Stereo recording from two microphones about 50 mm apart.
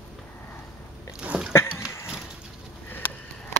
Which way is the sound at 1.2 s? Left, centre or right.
Right.